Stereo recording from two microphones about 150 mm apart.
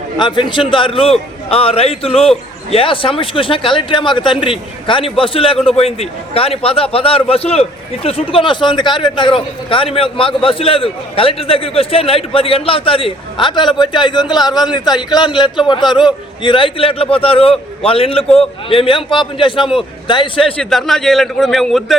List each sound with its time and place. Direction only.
0.2 s a man's voice: 30° left (ahead or behind)
20.4 s a man's voice: 5° left (ahead or behind)